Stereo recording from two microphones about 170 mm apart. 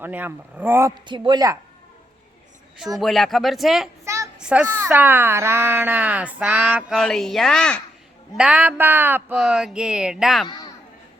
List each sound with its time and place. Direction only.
0.0 s a woman's voice: 10° right (ahead or behind)
3.0 s speech: centre (ahead or behind)
4.0 s a sound: 15° right (ahead or behind)
4.4 s a woman's voice: 5° right (ahead or behind)
8.4 s a woman's voice: 5° right (ahead or behind)
9.3 s speech: centre (ahead or behind)
10.4 s speech: 25° left (ahead or behind)